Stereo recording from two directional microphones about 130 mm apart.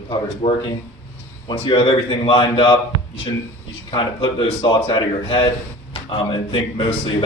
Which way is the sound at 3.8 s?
40° left (ahead or behind).